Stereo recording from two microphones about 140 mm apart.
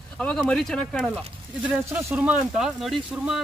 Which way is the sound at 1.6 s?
10° right (ahead or behind).